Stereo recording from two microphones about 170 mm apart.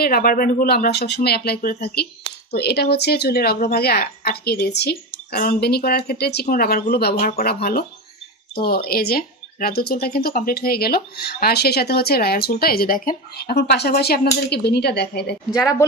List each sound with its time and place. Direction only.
0.0 s speech: 60° left (ahead or behind)
6.4 s speech: 55° left (ahead or behind); by 15.3 s 70° left (ahead or behind)
15.5 s a woman's voice: 20° left (ahead or behind)